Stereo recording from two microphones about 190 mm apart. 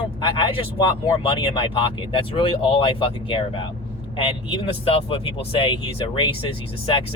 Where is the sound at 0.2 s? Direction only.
25° left (ahead or behind).